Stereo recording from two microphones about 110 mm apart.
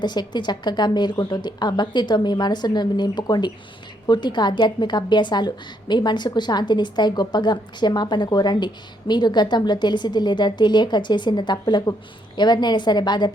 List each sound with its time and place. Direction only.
0.0 s a woman's voice: 40° left (ahead or behind)